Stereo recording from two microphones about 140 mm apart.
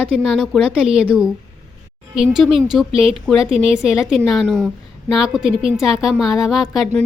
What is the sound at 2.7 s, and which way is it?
A woman's voice, centre (ahead or behind).